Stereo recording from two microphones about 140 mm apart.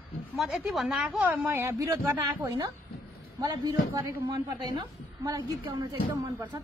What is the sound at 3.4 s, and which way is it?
A man's voice, 30° right (ahead or behind).